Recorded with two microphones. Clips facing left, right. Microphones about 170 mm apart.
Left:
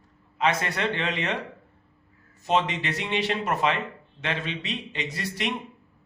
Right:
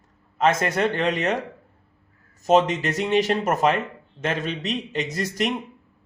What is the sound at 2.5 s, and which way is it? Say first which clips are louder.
A man's voice: right 6 dB; 45° right (ahead or behind).